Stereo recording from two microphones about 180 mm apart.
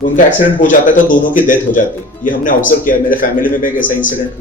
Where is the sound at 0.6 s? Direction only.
45° left (ahead or behind).